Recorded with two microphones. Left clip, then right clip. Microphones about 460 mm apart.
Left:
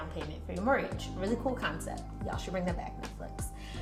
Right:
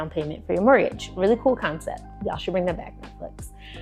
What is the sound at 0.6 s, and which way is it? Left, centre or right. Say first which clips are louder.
Speech: right 12 dB; left.